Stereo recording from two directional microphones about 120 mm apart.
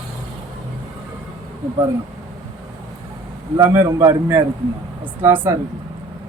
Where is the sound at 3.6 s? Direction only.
25° right (ahead or behind).